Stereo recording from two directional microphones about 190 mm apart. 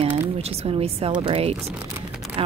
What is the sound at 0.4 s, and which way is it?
Speech, 30° right (ahead or behind).